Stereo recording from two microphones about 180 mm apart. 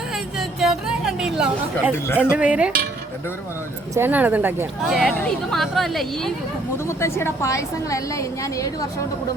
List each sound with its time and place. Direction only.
0.1 s chatter: 5° right (ahead or behind)
2.4 s speech: 5° right (ahead or behind)
3.9 s speech: 10° right (ahead or behind)
6.8 s a woman's voice: 15° left (ahead or behind)